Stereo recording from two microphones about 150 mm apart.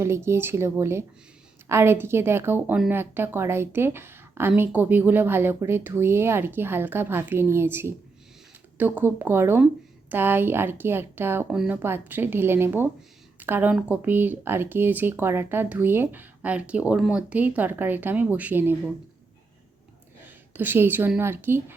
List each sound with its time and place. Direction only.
0.0 s a woman's voice: 15° right (ahead or behind)
11.5 s speech: 5° right (ahead or behind)
11.8 s a woman's voice: 15° right (ahead or behind)
20.2 s a woman's voice: 10° right (ahead or behind)